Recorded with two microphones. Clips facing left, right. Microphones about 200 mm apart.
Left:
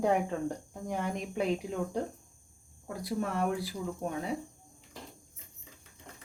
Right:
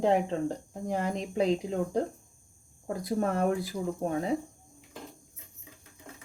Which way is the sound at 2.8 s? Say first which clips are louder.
Right 5 dB; 40° right (ahead or behind).